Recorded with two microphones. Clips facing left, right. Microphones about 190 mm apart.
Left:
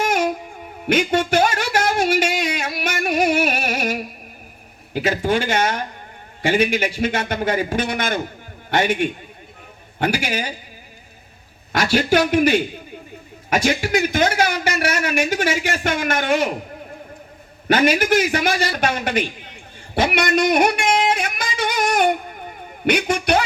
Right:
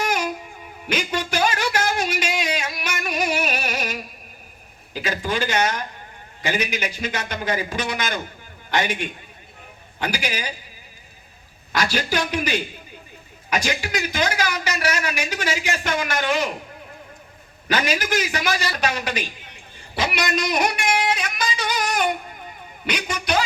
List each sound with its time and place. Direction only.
0.9 s speech: 55° left (ahead or behind)
11.7 s a man's voice: 55° left (ahead or behind)
17.7 s speech: 55° left (ahead or behind)
20.0 s music: 55° left (ahead or behind)
22.8 s speech: 55° left (ahead or behind)